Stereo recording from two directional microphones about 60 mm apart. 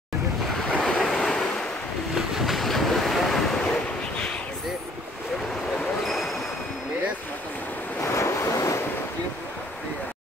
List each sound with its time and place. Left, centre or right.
0.7 s waves: centre
2.1 s waves: centre
5.8 s a sound: centre
8.0 s waves: left